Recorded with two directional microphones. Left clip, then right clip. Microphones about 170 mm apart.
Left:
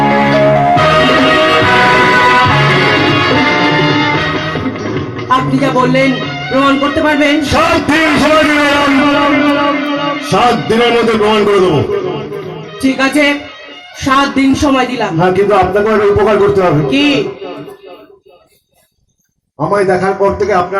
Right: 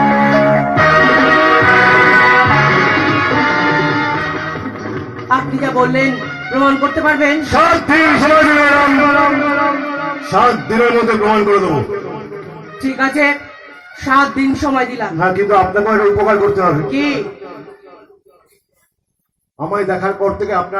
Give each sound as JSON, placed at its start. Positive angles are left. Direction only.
{"t": 0.0, "sound": "music", "side_deg": 25}
{"t": 12.8, "sound": "a man's voice", "side_deg": 25}
{"t": 19.5, "sound": "a man's voice", "side_deg": 25}